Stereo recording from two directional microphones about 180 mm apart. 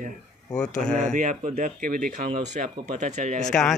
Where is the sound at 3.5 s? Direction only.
Centre (ahead or behind).